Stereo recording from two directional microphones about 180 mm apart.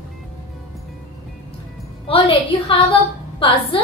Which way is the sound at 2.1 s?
30° left (ahead or behind).